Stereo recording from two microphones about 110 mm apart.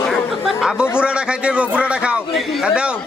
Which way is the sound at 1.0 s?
10° right (ahead or behind).